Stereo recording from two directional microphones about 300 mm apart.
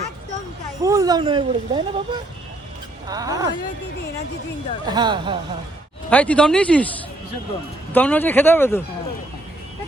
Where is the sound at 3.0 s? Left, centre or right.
Centre.